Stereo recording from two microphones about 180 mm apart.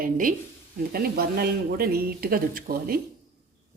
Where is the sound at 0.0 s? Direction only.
50° right (ahead or behind).